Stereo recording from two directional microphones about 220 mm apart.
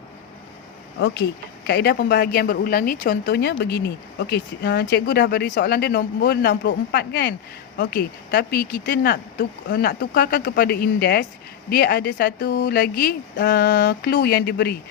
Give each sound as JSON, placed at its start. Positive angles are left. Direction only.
{"t": 0.9, "sound": "a woman's voice", "side_deg": 50}